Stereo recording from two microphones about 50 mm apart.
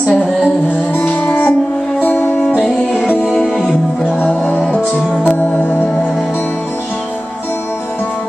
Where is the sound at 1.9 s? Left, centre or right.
Left.